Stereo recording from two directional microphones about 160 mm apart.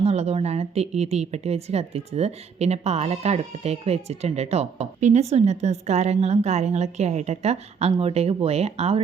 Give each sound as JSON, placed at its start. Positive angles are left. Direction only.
{"t": 0.0, "sound": "a woman's voice", "side_deg": -40}